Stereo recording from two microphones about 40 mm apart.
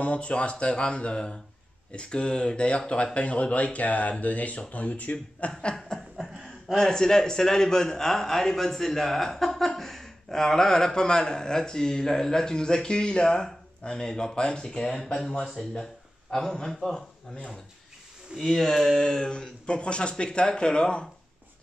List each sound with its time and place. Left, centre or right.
0.0 s speech: left
5.9 s chuckle: centre
6.8 s a man's voice: centre
18.4 s speech: centre; by 21.1 s left